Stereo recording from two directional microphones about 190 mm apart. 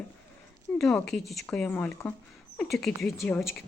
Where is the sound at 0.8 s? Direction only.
5° left (ahead or behind).